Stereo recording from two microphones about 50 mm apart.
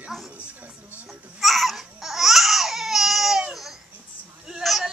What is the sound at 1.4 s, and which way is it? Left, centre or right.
Babbling, centre.